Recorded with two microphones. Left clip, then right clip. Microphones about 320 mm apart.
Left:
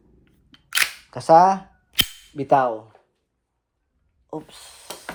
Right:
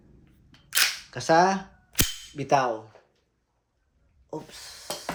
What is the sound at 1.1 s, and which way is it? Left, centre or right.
Speech, centre.